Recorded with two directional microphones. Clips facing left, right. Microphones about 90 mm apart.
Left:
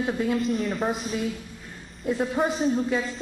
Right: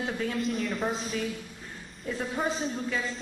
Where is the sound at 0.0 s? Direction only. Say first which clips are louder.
Left 6 dB; 20° left (ahead or behind).